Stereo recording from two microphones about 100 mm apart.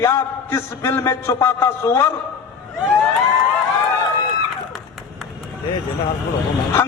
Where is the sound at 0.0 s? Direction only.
25° left (ahead or behind).